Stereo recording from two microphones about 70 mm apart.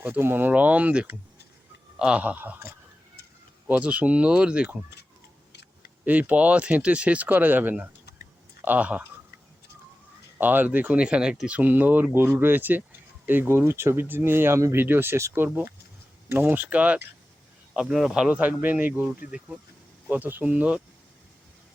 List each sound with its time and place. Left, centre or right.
0.0 s speech: right
3.7 s speech: centre
6.1 s speech: right
10.3 s speech: right
17.9 s speech: centre
18.3 s speech: right